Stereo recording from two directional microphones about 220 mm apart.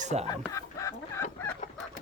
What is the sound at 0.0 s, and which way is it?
Speech, 30° right (ahead or behind).